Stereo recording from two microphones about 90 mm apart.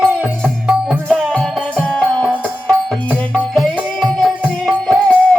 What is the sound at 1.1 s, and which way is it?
Music, 5° left (ahead or behind).